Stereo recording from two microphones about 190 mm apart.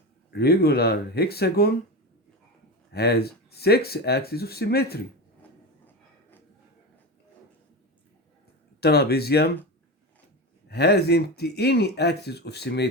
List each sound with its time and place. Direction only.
0.3 s speech: 55° left (ahead or behind)
2.9 s speech: 60° left (ahead or behind)
8.8 s speech: 55° left (ahead or behind)
10.7 s speech: 60° left (ahead or behind)